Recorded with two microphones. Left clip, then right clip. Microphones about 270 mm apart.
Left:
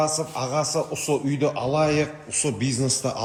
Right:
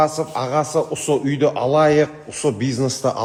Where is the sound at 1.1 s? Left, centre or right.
Right.